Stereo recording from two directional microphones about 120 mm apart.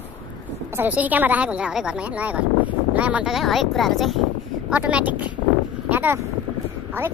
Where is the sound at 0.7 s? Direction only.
15° right (ahead or behind).